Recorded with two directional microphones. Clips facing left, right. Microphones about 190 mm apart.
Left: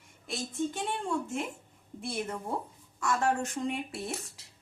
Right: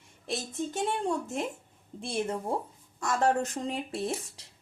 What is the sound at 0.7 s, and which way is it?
A woman's voice, 40° right (ahead or behind).